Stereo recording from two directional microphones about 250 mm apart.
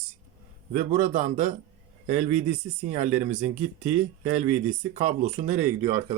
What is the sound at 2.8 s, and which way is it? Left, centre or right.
Speech, right.